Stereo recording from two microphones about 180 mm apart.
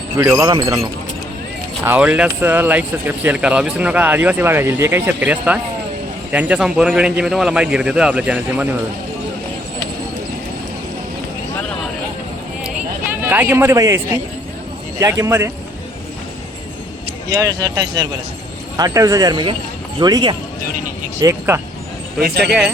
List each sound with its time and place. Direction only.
0.2 s a man's voice: 20° right (ahead or behind)
13.2 s speech: 10° right (ahead or behind)
15.0 s speech: 15° right (ahead or behind)
17.3 s speech: 20° right (ahead or behind)
22.2 s speech: 65° right (ahead or behind)